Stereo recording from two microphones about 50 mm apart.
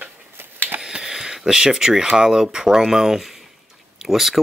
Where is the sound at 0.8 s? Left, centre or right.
Centre.